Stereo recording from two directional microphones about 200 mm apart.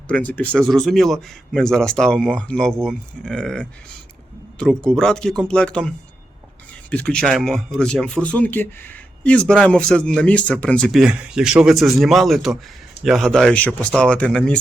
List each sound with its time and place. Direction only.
0.1 s speech: 5° left (ahead or behind)
6.9 s speech: 5° left (ahead or behind)